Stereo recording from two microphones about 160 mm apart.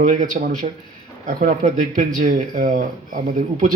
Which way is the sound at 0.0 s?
55° right (ahead or behind).